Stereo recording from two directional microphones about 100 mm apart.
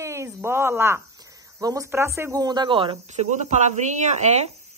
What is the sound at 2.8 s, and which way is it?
Speech, 70° right (ahead or behind).